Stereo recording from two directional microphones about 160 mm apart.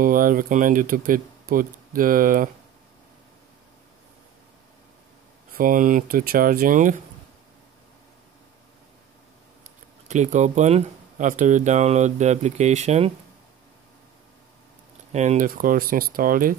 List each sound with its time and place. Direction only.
0.0 s speech: 60° right (ahead or behind)
5.5 s speech: 60° right (ahead or behind)
10.0 s speech: 50° right (ahead or behind)
15.1 s speech: 50° right (ahead or behind)